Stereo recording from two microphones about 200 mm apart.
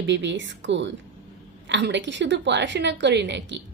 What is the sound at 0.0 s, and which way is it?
A woman's voice, 65° right (ahead or behind).